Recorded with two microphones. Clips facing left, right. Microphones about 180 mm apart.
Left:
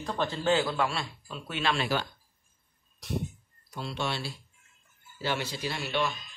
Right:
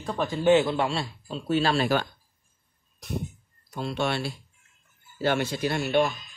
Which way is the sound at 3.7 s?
50° right (ahead or behind).